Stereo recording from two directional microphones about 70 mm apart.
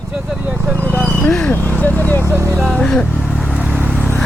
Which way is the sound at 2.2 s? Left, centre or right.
Right.